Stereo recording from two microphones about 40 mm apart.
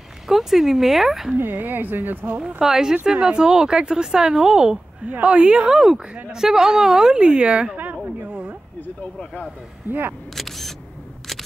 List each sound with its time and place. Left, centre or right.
0.3 s a woman's voice: centre
1.3 s a woman's voice: right
2.4 s a woman's voice: centre
5.7 s a woman's voice: centre
7.7 s a sound: right
8.3 s a sound: right
9.0 s speech: left
9.8 s speech: right
10.3 s single-lens reflex camera: centre